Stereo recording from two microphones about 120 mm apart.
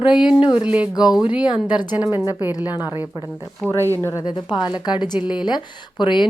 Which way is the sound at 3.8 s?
25° right (ahead or behind).